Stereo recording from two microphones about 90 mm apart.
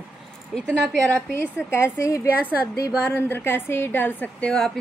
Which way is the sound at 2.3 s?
15° right (ahead or behind).